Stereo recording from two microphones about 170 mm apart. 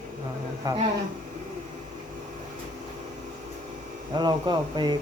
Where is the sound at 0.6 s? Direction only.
20° right (ahead or behind).